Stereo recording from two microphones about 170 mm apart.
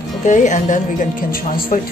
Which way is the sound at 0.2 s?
45° left (ahead or behind).